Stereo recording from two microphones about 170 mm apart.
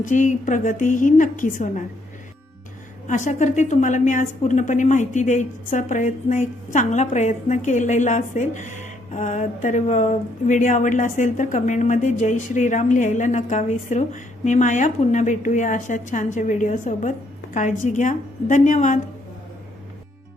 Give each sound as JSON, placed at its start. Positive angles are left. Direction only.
{"t": 0.0, "sound": "a woman's voice", "side_deg": 50}
{"t": 3.1, "sound": "a woman's voice", "side_deg": 45}